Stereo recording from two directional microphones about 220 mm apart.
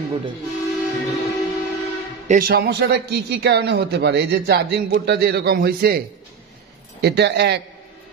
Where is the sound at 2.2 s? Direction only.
40° right (ahead or behind).